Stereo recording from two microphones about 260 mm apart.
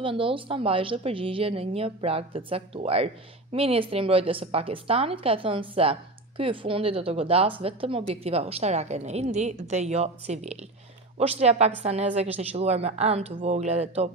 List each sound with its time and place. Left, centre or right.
0.0 s a woman's voice: centre